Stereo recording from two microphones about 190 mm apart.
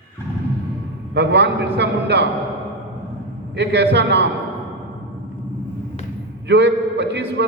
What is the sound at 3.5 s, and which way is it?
Speech, 65° right (ahead or behind).